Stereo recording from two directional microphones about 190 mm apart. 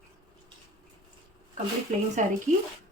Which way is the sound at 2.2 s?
40° right (ahead or behind).